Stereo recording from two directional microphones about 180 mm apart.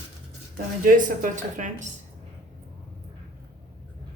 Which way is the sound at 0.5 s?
50° right (ahead or behind).